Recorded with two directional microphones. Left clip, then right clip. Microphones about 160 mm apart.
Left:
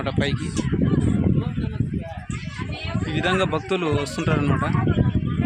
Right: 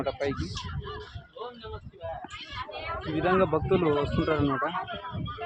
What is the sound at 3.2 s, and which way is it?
A man's voice, 20° left (ahead or behind).